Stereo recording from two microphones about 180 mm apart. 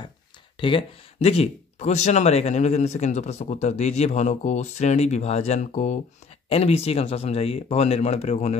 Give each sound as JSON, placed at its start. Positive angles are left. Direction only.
{"t": 0.6, "sound": "speech", "side_deg": 30}